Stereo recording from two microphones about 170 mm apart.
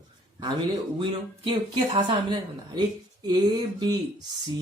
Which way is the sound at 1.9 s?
30° right (ahead or behind).